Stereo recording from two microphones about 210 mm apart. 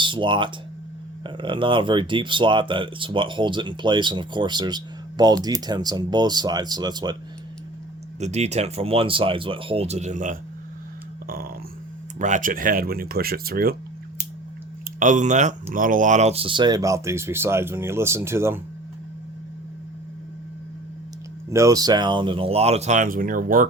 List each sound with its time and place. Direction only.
0.0 s speech: 25° right (ahead or behind)
8.2 s speech: 30° right (ahead or behind)
14.9 s speech: 35° right (ahead or behind); by 18.6 s 10° right (ahead or behind)
21.5 s speech: 15° right (ahead or behind); by 23.6 s 40° right (ahead or behind)